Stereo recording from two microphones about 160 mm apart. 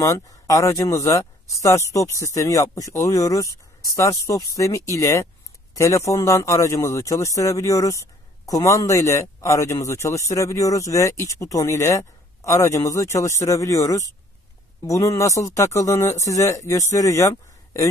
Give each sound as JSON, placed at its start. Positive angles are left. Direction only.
{"t": 0.0, "sound": "speech", "side_deg": 20}